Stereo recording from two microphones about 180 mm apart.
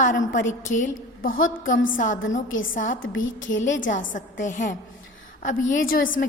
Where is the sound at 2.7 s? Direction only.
50° left (ahead or behind).